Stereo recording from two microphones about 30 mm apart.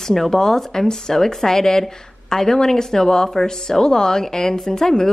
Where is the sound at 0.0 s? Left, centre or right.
Centre.